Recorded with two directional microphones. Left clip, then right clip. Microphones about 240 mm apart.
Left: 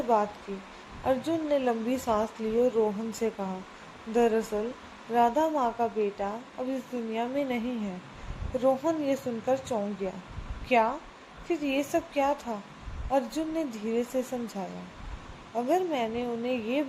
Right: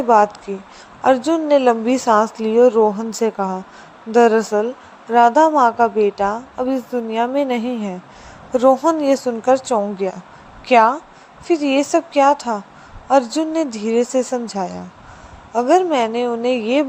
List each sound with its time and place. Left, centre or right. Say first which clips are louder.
1.0 s a woman's voice: right 13 dB; right